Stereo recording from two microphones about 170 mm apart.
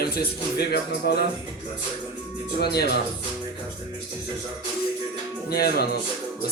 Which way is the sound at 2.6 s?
70° left (ahead or behind).